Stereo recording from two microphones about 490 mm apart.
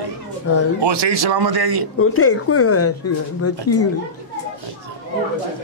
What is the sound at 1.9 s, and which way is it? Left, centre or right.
A woman's voice, left.